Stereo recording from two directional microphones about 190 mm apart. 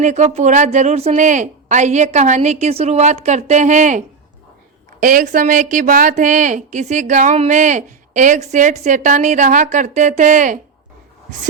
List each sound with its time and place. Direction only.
0.0 s a woman's voice: 35° right (ahead or behind)